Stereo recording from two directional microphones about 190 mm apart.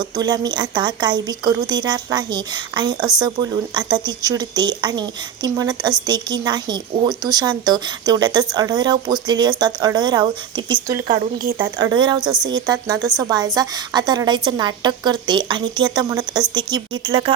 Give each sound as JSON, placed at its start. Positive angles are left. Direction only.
{"t": 0.2, "sound": "speech", "side_deg": -20}